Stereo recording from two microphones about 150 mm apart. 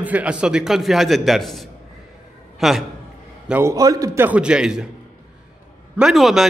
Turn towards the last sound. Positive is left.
turn(degrees=0)  # may be behind; listen again after turning